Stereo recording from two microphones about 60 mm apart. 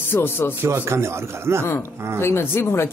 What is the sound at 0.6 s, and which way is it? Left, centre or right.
A man's voice, right.